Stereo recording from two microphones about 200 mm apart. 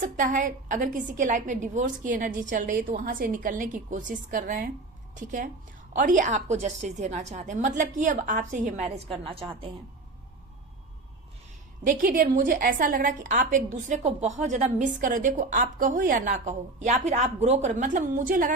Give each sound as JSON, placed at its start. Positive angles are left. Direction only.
{"t": 0.0, "sound": "a woman's voice", "side_deg": -40}
{"t": 5.9, "sound": "a woman's voice", "side_deg": -40}
{"t": 11.8, "sound": "a woman's voice", "side_deg": -40}